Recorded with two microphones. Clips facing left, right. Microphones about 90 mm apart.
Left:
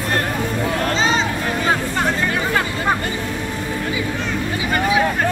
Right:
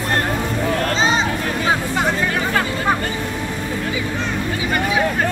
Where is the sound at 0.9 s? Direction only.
20° right (ahead or behind).